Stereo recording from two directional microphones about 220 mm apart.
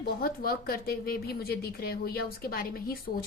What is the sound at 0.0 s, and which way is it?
A woman's voice, 40° left (ahead or behind).